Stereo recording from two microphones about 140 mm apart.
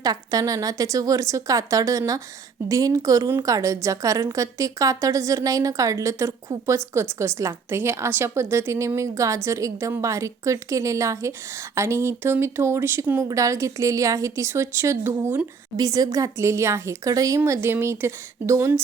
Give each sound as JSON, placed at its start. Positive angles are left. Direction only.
{"t": 0.0, "sound": "a woman's voice", "side_deg": -25}